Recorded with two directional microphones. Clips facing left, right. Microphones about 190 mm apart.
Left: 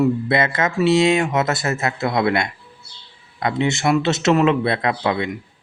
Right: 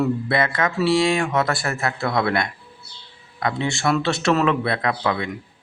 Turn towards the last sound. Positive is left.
turn(degrees=25)  # may be behind; listen again after turning